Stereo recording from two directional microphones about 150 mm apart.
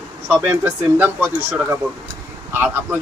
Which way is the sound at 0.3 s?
10° right (ahead or behind).